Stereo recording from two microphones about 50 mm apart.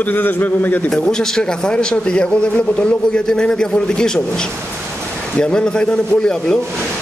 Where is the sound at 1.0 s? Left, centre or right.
Centre.